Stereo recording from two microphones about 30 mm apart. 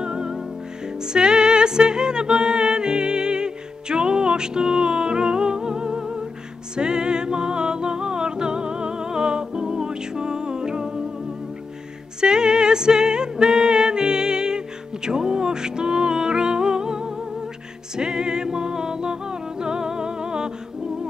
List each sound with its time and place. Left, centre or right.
0.0 s music: right
12.2 s music: right